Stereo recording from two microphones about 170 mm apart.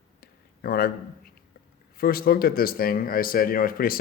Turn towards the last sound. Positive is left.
turn(degrees=60)  # may be behind; listen again after turning